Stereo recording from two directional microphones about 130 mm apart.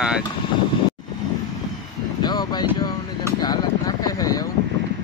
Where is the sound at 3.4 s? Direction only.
30° left (ahead or behind).